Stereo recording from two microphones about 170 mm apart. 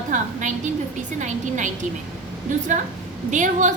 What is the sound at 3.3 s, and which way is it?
Speech, 45° right (ahead or behind).